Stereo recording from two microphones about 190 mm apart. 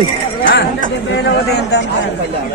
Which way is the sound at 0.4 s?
50° left (ahead or behind).